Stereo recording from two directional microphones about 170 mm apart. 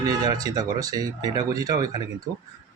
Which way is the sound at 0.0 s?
20° right (ahead or behind).